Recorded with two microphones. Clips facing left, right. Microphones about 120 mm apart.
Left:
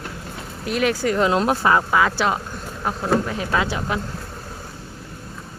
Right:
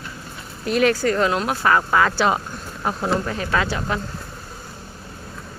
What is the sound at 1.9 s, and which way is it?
A woman's voice, 5° left (ahead or behind).